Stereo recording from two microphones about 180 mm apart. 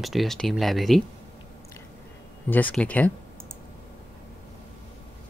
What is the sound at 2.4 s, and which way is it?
Speech, 10° left (ahead or behind).